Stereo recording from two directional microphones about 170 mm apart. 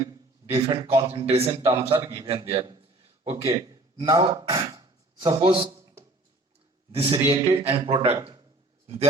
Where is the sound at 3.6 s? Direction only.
25° right (ahead or behind).